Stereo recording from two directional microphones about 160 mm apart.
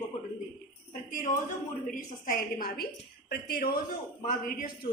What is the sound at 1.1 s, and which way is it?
A woman's voice, 60° left (ahead or behind).